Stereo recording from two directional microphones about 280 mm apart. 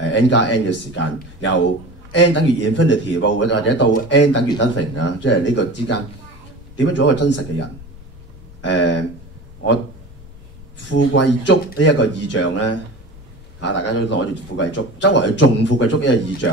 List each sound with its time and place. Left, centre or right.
0.1 s speech: left
8.6 s speech: left
10.9 s speech: left